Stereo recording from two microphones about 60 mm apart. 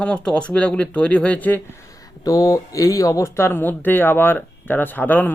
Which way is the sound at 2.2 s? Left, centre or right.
Left.